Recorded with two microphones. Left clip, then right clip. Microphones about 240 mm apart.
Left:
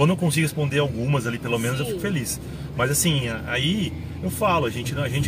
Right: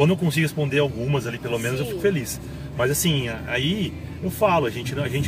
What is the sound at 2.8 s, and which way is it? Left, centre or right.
Speech, centre.